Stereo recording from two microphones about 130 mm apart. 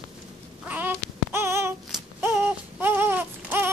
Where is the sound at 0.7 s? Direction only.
15° right (ahead or behind).